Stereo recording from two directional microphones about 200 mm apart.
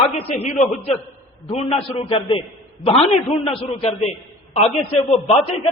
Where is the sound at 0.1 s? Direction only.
30° left (ahead or behind).